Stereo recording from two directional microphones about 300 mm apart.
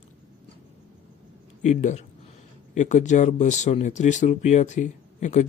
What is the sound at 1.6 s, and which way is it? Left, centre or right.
Speech, left.